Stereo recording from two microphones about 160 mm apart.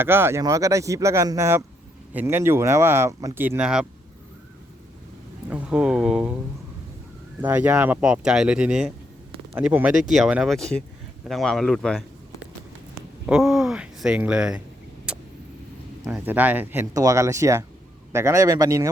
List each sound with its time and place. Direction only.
0.0 s a man's voice: 15° right (ahead or behind)
5.5 s speech: 10° right (ahead or behind)
7.4 s a man's voice: 10° right (ahead or behind)
15.1 s vehicle: 5° right (ahead or behind)
16.0 s speech: 10° right (ahead or behind)
16.9 s a man's voice: 20° right (ahead or behind)